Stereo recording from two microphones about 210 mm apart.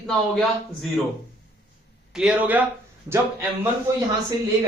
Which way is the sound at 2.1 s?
5° right (ahead or behind).